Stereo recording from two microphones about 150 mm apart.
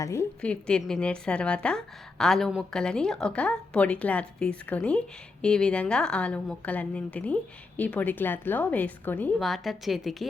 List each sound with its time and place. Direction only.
0.0 s a woman's voice: 20° left (ahead or behind)
0.4 s a woman's voice: 5° left (ahead or behind)
9.4 s a woman's voice: centre (ahead or behind)